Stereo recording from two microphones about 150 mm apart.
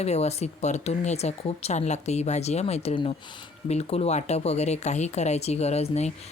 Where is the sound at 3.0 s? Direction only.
30° left (ahead or behind).